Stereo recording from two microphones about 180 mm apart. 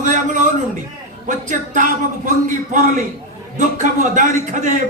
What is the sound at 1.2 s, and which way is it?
Speech, 45° right (ahead or behind).